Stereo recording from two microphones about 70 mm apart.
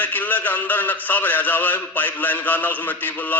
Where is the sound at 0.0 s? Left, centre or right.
Left.